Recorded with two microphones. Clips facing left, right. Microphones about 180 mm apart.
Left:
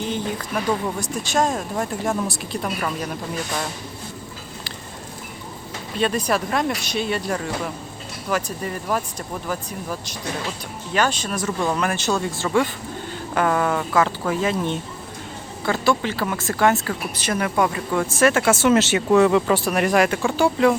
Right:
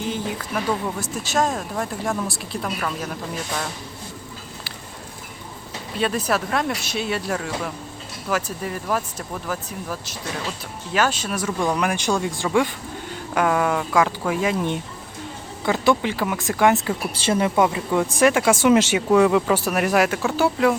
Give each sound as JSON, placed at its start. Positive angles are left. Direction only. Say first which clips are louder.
{"t": 0.0, "sound": "speech", "louder": "left 1 dB", "side_deg": -5}
{"t": 6.0, "sound": "speech", "louder": "left 1 dB", "side_deg": -5}
{"t": 16.8, "sound": "speech", "louder": "right 3 dB", "side_deg": -25}